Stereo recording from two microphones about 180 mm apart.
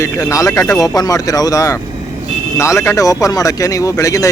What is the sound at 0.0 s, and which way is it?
Speech, 15° left (ahead or behind).